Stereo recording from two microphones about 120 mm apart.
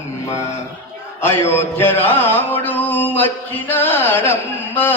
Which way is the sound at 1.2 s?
20° left (ahead or behind).